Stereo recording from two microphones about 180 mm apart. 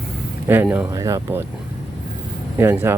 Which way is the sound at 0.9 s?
20° right (ahead or behind).